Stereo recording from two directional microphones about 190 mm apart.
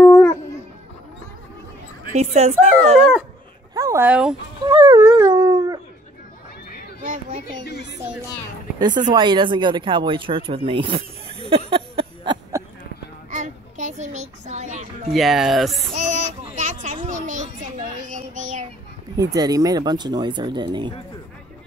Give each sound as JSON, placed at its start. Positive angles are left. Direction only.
{"t": 0.0, "sound": "dog", "side_deg": 10}
{"t": 2.1, "sound": "speech", "side_deg": -35}
{"t": 3.7, "sound": "speech", "side_deg": -15}
{"t": 4.6, "sound": "dog", "side_deg": -20}
{"t": 7.0, "sound": "a sound", "side_deg": -45}
{"t": 7.6, "sound": "speech", "side_deg": 60}
{"t": 8.0, "sound": "speech", "side_deg": -10}
{"t": 8.7, "sound": "speech", "side_deg": -25}
{"t": 13.3, "sound": "music", "side_deg": -40}
{"t": 15.1, "sound": "speech", "side_deg": 0}
{"t": 16.4, "sound": "a sound", "side_deg": -40}
{"t": 18.0, "sound": "child singing", "side_deg": -40}
{"t": 19.1, "sound": "speech", "side_deg": -20}